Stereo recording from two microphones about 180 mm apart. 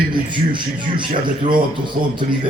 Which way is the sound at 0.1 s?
25° right (ahead or behind).